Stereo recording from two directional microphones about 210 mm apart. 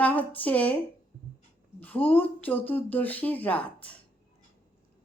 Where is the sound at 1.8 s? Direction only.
10° left (ahead or behind).